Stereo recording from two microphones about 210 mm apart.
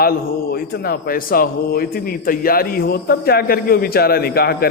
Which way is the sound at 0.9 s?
45° left (ahead or behind).